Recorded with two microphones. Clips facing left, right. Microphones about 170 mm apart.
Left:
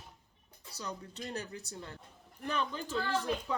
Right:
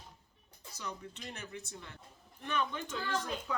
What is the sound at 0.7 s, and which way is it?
Speech, 35° left (ahead or behind).